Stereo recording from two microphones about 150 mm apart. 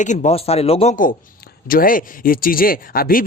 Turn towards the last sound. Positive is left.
turn(degrees=75)  # may be behind; listen again after turning